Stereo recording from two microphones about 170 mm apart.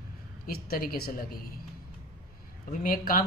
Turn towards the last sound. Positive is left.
turn(degrees=55)  # may be behind; listen again after turning